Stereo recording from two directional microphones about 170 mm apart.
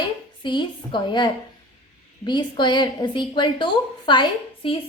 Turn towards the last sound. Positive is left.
turn(degrees=30)  # may be behind; listen again after turning